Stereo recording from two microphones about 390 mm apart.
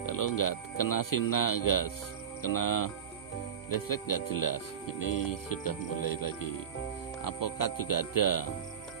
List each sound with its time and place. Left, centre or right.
0.0 s speech: left